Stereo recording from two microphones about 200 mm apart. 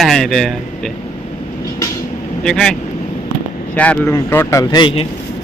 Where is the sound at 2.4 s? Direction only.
5° left (ahead or behind).